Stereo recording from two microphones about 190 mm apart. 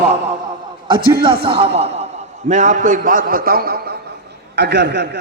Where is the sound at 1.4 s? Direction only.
30° right (ahead or behind).